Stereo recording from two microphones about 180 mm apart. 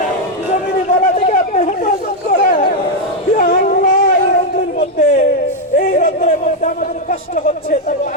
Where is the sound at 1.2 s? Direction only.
45° left (ahead or behind).